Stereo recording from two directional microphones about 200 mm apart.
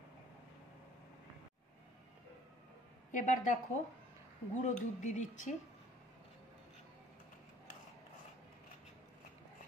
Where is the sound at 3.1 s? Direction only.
40° left (ahead or behind).